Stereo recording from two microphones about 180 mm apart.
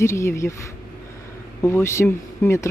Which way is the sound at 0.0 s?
15° left (ahead or behind).